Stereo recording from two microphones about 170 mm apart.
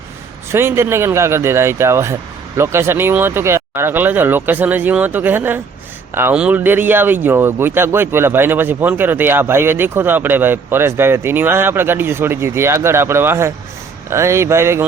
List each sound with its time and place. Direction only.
0.5 s a man's voice: 15° right (ahead or behind)